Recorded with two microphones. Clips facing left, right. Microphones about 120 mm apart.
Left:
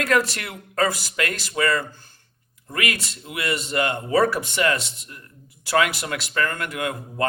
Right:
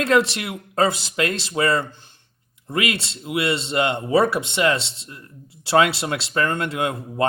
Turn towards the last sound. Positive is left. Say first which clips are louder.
# right 3 dB
turn(degrees=-25)  # may be behind; listen again after turning